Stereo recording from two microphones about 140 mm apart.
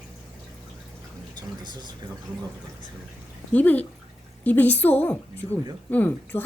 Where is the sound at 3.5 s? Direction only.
10° left (ahead or behind).